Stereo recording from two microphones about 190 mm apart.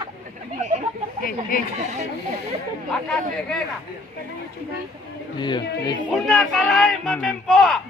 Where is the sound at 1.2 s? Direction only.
50° left (ahead or behind).